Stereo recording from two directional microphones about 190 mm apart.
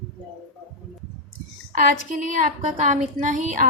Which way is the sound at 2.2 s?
45° right (ahead or behind).